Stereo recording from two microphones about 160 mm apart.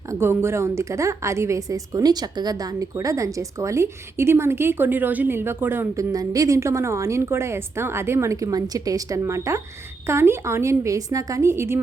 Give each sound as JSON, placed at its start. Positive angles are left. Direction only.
{"t": 0.1, "sound": "a woman's voice", "side_deg": -15}